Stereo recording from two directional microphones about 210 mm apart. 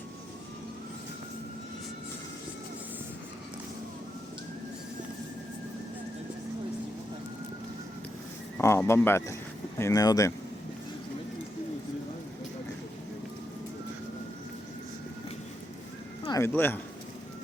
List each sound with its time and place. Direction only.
8.5 s speech: 10° left (ahead or behind)
16.2 s a sound: 20° left (ahead or behind)
16.5 s speech: 10° left (ahead or behind)